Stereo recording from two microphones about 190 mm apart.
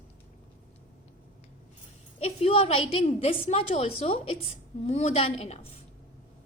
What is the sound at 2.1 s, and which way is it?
A woman's voice, 35° left (ahead or behind).